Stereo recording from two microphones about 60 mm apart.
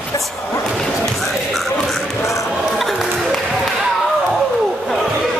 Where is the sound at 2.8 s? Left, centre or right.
Centre.